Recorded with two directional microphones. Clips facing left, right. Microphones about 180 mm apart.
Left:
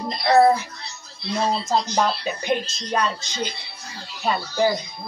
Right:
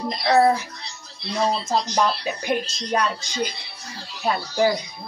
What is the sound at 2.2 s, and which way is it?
Speech, 5° right (ahead or behind).